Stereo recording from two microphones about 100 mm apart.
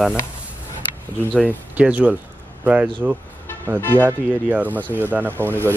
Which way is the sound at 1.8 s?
15° right (ahead or behind).